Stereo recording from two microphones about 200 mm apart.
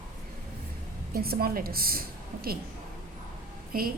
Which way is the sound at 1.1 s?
50° right (ahead or behind).